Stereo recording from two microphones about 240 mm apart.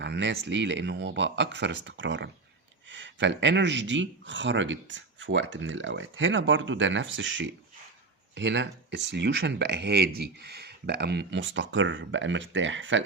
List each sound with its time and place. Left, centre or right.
0.0 s speech: right